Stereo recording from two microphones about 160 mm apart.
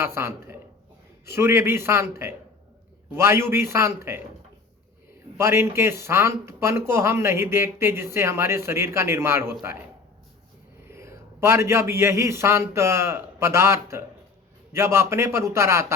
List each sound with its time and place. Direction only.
0.0 s speech: 15° right (ahead or behind)
5.4 s speech: 15° right (ahead or behind)
10.8 s a man's voice: 15° right (ahead or behind)